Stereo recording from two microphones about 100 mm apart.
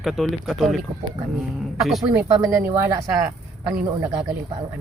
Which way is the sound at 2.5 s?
20° right (ahead or behind).